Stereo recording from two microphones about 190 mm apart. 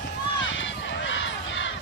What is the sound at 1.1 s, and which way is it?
Crowd, 80° left.